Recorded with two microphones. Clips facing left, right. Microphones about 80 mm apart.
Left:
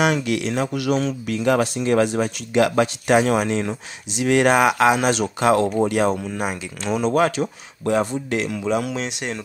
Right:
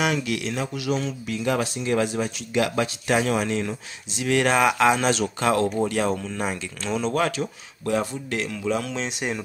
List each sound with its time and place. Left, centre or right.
0.0 s speech: left
0.5 s speech: left
3.3 s speech: left
8.9 s speech: centre